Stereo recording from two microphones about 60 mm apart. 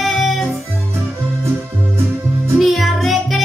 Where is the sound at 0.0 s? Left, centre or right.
Centre.